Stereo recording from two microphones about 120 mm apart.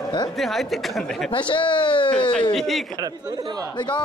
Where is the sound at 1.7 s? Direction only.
45° left (ahead or behind).